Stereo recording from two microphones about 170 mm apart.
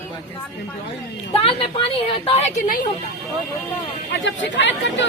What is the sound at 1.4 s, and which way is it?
Speech, 35° left (ahead or behind).